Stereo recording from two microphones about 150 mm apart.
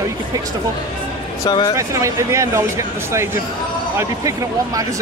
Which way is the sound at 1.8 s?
20° right (ahead or behind).